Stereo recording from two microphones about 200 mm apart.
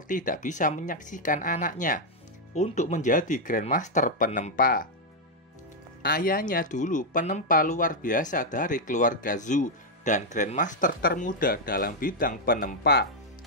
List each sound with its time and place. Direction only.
0.1 s speech: 40° left (ahead or behind)
6.0 s speech: 45° left (ahead or behind)